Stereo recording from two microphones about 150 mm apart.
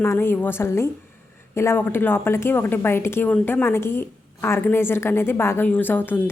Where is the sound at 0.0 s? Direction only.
15° left (ahead or behind).